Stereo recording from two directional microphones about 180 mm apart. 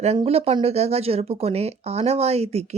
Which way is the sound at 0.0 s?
35° right (ahead or behind).